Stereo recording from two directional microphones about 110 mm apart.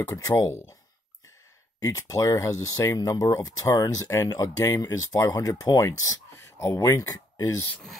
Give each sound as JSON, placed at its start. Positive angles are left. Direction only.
{"t": 0.0, "sound": "speech", "side_deg": 30}
{"t": 1.8, "sound": "speech", "side_deg": 30}